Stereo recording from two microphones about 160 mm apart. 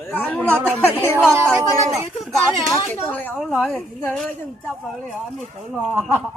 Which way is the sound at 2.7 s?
10° left (ahead or behind).